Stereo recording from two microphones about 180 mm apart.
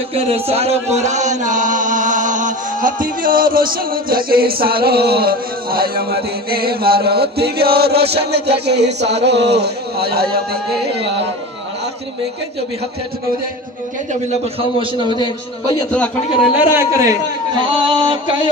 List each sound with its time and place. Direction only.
0.1 s a man's voice: 35° right (ahead or behind)
0.9 s mantra: 40° right (ahead or behind); by 11.2 s 65° right (ahead or behind)
14.6 s a man's voice: 30° right (ahead or behind)
15.0 s a man's voice: 25° left (ahead or behind)
15.9 s a man's voice: 5° left (ahead or behind)
16.5 s a man's voice: 15° right (ahead or behind)